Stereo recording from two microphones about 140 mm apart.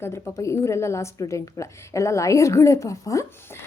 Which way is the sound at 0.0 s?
20° left (ahead or behind).